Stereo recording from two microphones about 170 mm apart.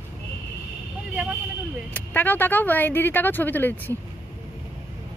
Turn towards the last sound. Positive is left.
turn(degrees=10)  # may be behind; listen again after turning